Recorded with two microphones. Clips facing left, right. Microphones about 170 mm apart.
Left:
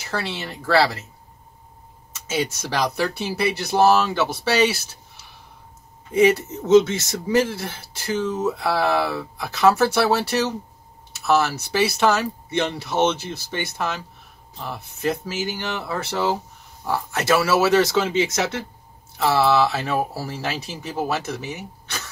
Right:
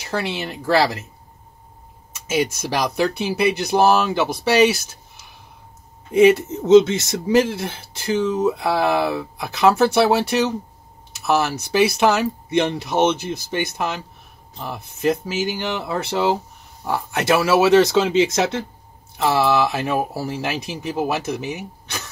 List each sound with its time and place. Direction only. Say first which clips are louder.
0.0 s speech: right 3 dB; 15° right (ahead or behind)
2.3 s speech: right 3 dB; 10° right (ahead or behind)
6.1 s speech: right 4 dB; 15° right (ahead or behind)